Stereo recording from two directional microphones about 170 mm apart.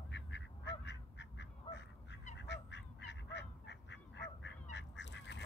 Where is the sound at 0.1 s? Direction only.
90° left.